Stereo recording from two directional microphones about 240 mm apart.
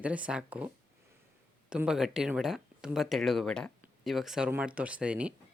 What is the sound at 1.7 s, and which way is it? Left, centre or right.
Speech, centre.